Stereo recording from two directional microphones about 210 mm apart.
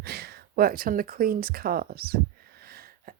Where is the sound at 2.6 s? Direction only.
45° right (ahead or behind).